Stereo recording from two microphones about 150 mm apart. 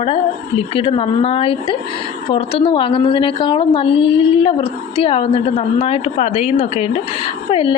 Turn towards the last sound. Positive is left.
turn(degrees=35)  # may be behind; listen again after turning